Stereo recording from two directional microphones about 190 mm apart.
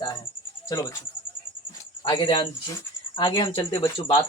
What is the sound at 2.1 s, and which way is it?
Speech, 25° left (ahead or behind).